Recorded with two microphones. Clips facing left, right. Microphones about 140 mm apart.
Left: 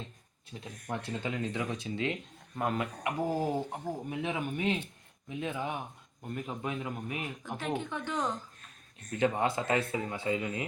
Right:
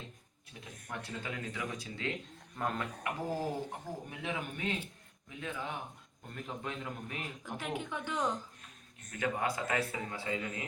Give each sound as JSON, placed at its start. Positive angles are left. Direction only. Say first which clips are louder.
{"t": 0.6, "sound": "a man's voice", "louder": "left 6 dB", "side_deg": 25}
{"t": 7.6, "sound": "a woman's voice", "louder": "left 4 dB", "side_deg": -10}
{"t": 9.0, "sound": "speech", "louder": "left 5 dB", "side_deg": 25}